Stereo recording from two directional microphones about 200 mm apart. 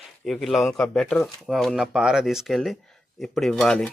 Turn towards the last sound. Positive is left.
turn(degrees=5)  # may be behind; listen again after turning